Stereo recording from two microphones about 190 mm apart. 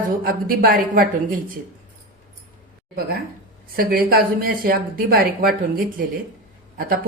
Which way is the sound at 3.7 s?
50° right (ahead or behind).